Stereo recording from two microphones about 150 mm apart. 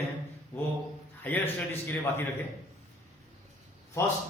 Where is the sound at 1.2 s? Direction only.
10° left (ahead or behind).